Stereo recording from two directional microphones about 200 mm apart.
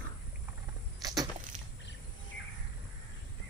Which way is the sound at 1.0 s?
20° right (ahead or behind).